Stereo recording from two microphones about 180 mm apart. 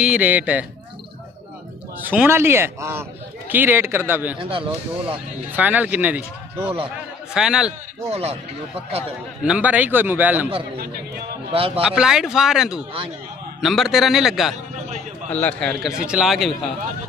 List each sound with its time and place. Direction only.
0.0 s a man's voice: 5° right (ahead or behind)
2.0 s a man's voice: 10° right (ahead or behind)
4.4 s speech: 30° right (ahead or behind)
5.5 s a man's voice: 10° right (ahead or behind)
8.1 s speech: 35° right (ahead or behind)
9.4 s a man's voice: 5° right (ahead or behind)
11.5 s speech: 30° right (ahead or behind)
11.8 s a man's voice: 5° right (ahead or behind)